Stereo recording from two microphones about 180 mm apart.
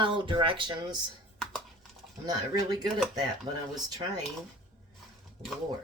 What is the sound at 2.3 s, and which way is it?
Speech, 20° right (ahead or behind).